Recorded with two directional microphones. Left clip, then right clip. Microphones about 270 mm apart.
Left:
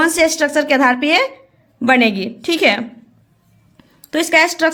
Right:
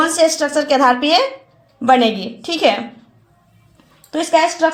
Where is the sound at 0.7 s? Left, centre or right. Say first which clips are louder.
Right 3 dB; centre.